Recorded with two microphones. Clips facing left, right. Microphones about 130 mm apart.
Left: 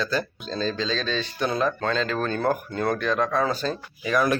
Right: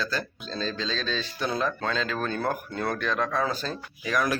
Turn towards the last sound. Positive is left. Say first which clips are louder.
# left 4 dB
turn(degrees=0)  # may be behind; listen again after turning